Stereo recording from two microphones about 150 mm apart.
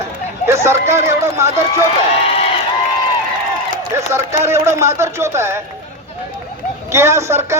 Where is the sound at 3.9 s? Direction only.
20° right (ahead or behind).